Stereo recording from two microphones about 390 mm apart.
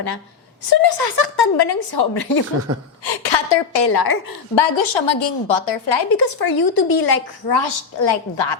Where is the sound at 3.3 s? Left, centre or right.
Left.